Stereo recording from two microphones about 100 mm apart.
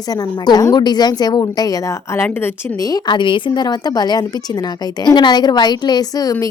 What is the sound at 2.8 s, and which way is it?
A woman's voice, 45° left (ahead or behind).